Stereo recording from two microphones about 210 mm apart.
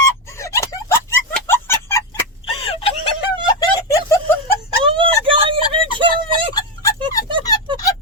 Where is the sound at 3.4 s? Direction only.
15° left (ahead or behind).